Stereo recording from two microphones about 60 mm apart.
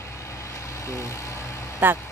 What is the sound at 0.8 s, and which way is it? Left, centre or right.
Vehicle, left.